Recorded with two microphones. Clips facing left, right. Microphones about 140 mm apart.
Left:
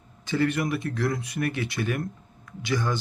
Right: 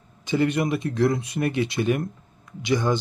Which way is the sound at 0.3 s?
20° right (ahead or behind).